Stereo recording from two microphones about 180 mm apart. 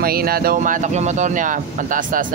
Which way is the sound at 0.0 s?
55° right (ahead or behind).